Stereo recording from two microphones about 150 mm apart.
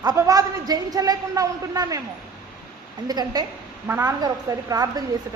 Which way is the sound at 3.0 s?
25° right (ahead or behind).